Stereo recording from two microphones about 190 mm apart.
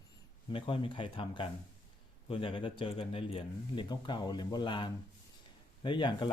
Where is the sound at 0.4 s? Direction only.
25° left (ahead or behind).